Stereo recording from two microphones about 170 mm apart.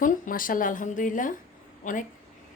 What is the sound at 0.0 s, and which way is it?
Speech, 55° left (ahead or behind).